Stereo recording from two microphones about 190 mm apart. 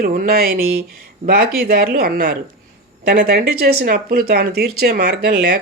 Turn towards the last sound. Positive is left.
turn(degrees=-55)  # may be behind; listen again after turning